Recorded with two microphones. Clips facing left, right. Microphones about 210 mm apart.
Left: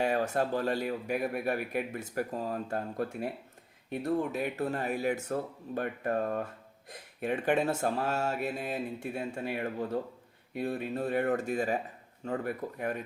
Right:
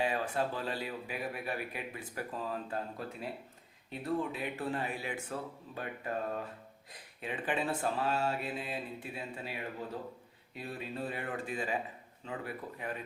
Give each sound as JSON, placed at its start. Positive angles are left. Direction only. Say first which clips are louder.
{"t": 0.0, "sound": "a man's voice", "louder": "left 4 dB", "side_deg": 45}